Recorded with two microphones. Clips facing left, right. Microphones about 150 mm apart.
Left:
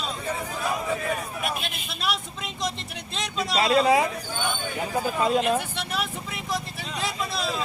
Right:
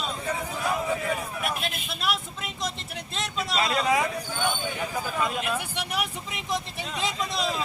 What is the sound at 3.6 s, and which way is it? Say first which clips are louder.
Speech: left 5 dB; 30° left (ahead or behind).